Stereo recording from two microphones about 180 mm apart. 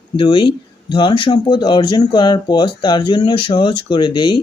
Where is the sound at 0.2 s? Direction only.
25° left (ahead or behind).